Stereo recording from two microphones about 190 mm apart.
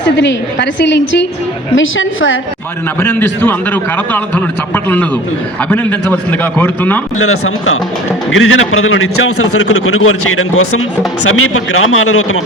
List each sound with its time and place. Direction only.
0.0 s a woman's voice: 70° left (ahead or behind)
1.7 s a man's voice: 90° left
3.0 s a man's voice: 10° left (ahead or behind)
7.2 s a man's voice: 90° left